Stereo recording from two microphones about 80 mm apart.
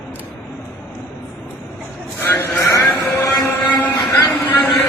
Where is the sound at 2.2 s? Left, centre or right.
Left.